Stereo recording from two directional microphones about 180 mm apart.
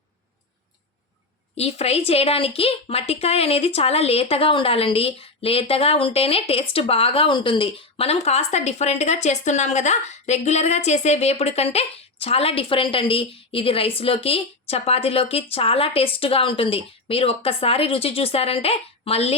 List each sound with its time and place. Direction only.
1.5 s speech: 35° left (ahead or behind)